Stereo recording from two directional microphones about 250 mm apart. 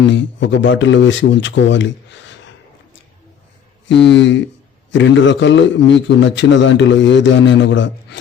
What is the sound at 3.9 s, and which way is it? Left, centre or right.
Speech, left.